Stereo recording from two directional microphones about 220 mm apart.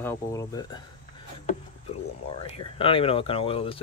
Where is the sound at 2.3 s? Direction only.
25° left (ahead or behind).